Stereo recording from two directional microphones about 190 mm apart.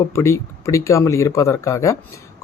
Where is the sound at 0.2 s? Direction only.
15° left (ahead or behind).